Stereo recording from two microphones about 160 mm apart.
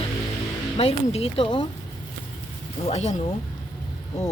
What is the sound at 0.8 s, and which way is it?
Speech, 40° left (ahead or behind).